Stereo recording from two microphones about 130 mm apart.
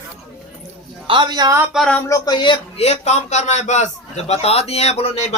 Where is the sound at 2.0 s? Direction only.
30° left (ahead or behind).